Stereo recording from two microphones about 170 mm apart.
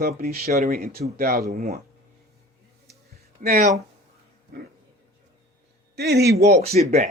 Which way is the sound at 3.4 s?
60° right (ahead or behind).